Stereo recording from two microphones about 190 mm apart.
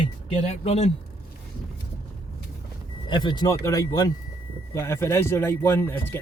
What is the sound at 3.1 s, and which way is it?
Speech, 25° left (ahead or behind).